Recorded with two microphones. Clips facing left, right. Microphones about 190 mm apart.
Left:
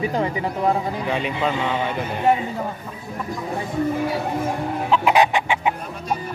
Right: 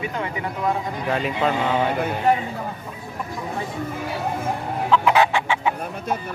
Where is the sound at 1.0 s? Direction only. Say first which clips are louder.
Right 3 dB; centre (ahead or behind).